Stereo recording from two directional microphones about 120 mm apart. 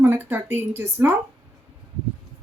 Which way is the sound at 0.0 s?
15° right (ahead or behind).